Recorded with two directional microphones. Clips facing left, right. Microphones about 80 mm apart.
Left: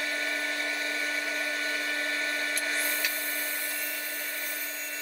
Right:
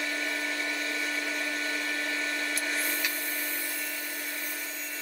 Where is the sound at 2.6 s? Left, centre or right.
Centre.